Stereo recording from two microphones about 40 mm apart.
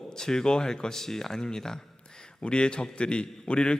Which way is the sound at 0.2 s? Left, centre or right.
Centre.